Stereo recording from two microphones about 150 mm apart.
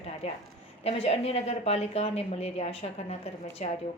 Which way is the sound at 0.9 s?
40° left (ahead or behind).